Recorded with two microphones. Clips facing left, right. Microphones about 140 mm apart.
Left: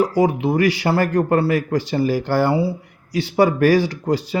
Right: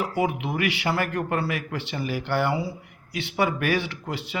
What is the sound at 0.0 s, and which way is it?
A man's voice, 35° left (ahead or behind).